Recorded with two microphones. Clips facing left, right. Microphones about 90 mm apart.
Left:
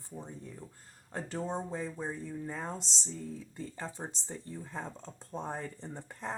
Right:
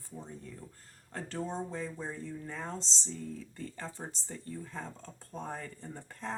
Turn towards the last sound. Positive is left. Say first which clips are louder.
# even
turn(degrees=20)  # may be behind; listen again after turning